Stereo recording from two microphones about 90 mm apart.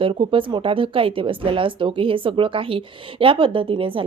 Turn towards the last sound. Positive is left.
turn(degrees=-80)